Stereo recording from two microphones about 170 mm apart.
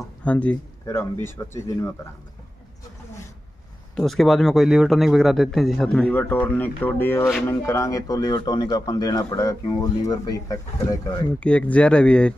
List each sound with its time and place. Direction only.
0.2 s speech: 5° left (ahead or behind)
3.9 s a man's voice: centre (ahead or behind); by 11.2 s 20° left (ahead or behind)
11.3 s speech: 5° left (ahead or behind)